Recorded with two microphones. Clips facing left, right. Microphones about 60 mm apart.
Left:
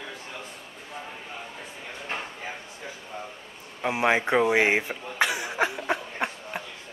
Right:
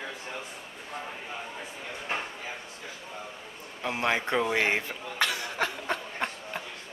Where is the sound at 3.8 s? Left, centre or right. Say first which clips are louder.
Left 5 dB; centre.